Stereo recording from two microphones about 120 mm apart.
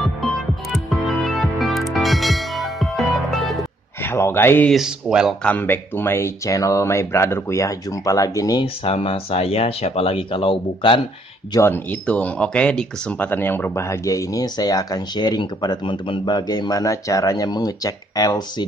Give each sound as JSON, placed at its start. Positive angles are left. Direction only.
{"t": 0.8, "sound": "music", "side_deg": 0}
{"t": 4.0, "sound": "speech", "side_deg": 20}
{"t": 4.6, "sound": "speech", "side_deg": -5}
{"t": 5.4, "sound": "speech", "side_deg": 15}
{"t": 8.8, "sound": "speech", "side_deg": 50}
{"t": 11.6, "sound": "speech", "side_deg": 15}